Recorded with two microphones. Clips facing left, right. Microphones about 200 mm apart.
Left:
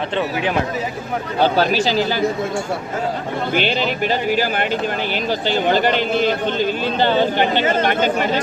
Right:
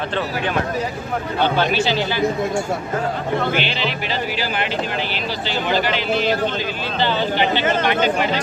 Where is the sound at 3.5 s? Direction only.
45° left (ahead or behind).